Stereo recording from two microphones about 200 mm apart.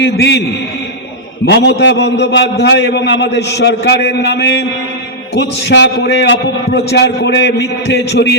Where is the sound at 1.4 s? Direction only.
55° left (ahead or behind).